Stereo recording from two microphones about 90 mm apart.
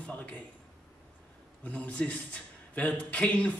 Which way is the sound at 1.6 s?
15° left (ahead or behind).